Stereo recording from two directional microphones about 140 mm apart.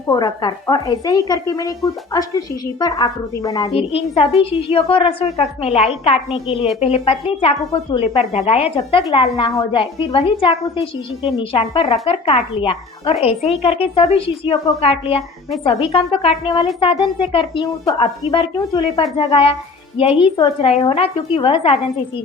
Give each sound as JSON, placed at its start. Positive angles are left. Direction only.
{"t": 0.1, "sound": "speech", "side_deg": 30}
{"t": 3.7, "sound": "a woman's voice", "side_deg": 45}
{"t": 9.3, "sound": "a woman's voice", "side_deg": 30}
{"t": 19.1, "sound": "a woman's voice", "side_deg": 40}